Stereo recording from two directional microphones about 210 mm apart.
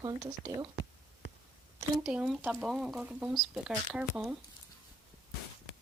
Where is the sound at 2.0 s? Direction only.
5° right (ahead or behind).